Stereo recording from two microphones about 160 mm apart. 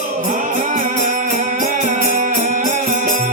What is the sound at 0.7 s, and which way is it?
Music, 50° right (ahead or behind).